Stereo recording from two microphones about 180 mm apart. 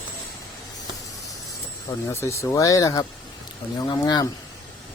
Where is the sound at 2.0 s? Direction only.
15° left (ahead or behind).